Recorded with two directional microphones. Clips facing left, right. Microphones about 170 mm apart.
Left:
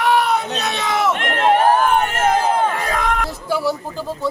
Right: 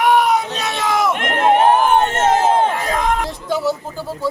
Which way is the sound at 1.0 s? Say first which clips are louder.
Even; 15° right (ahead or behind).